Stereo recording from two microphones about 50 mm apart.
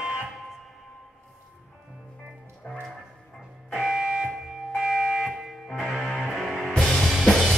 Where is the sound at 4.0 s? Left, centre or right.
Right.